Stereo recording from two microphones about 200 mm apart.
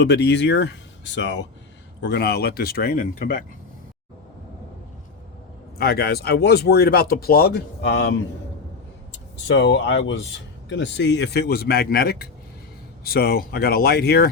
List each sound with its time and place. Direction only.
0.0 s speech: 60° left (ahead or behind)
5.7 s speech: 50° left (ahead or behind)
9.6 s speech: 60° left (ahead or behind)